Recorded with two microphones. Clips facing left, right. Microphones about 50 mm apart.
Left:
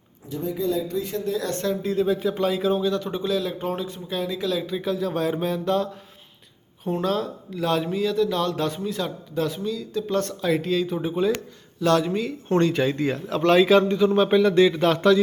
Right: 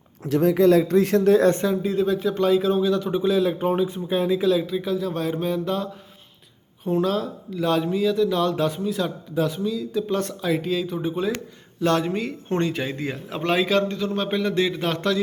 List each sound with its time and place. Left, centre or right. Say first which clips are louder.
0.3 s speech: right 9 dB; right
1.6 s speech: right 1 dB; centre
4.6 s speech: right 1 dB; centre
11.8 s speech: left 1 dB; right
12.7 s speech: left 5 dB; centre
13.3 s a man's voice: left 5 dB; centre
13.7 s a man's voice: left 5 dB; centre